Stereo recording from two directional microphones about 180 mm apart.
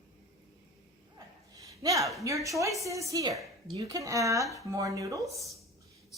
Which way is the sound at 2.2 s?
15° right (ahead or behind).